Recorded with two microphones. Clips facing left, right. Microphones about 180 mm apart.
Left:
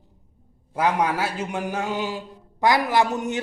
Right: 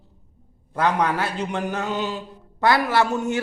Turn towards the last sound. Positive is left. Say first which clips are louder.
# right 1 dB
turn(degrees=15)  # may be behind; listen again after turning